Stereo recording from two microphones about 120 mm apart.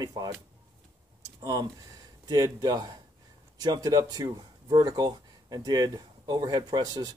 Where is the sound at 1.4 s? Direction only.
30° right (ahead or behind).